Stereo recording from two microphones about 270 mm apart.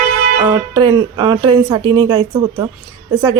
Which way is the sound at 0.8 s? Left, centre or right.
Centre.